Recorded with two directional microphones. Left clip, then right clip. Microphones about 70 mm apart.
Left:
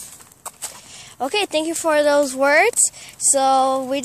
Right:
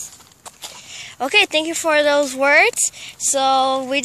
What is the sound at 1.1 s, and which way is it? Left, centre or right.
Speech, centre.